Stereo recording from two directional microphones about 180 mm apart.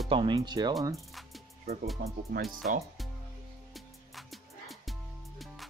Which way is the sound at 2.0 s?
65° right (ahead or behind).